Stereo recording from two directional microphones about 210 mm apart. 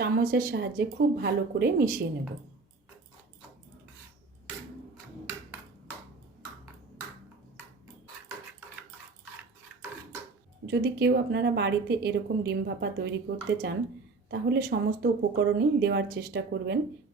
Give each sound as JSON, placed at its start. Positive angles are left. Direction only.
{"t": 0.0, "sound": "a woman's voice", "side_deg": -45}
{"t": 10.7, "sound": "a woman's voice", "side_deg": -50}